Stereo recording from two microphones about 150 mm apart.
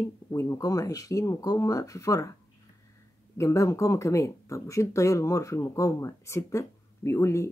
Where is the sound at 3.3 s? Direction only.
20° left (ahead or behind).